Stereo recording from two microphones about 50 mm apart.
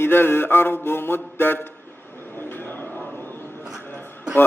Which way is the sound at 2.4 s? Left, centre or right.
Left.